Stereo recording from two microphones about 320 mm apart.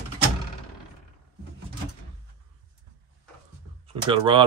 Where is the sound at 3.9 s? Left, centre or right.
Centre.